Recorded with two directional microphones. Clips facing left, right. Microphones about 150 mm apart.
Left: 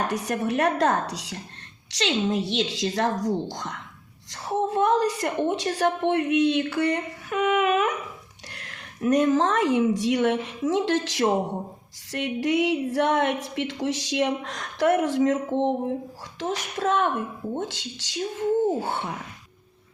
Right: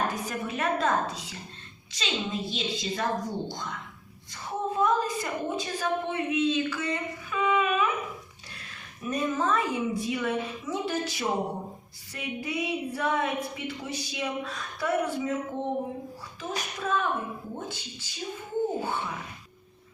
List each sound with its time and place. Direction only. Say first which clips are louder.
0.0 s a woman's voice: left 4 dB; 75° left (ahead or behind)
16.4 s speech: left 7 dB; 90° left
17.6 s speech: left 6 dB; 90° left